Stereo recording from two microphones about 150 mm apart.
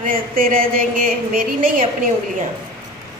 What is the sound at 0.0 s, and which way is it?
A woman's voice, 70° right (ahead or behind).